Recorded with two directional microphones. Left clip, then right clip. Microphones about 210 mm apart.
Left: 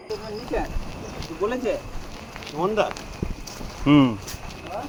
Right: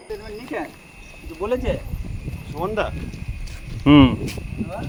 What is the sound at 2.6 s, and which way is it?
Speech, 20° right (ahead or behind).